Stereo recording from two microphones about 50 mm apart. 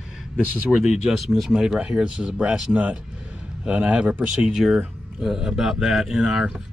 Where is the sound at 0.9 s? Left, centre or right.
Centre.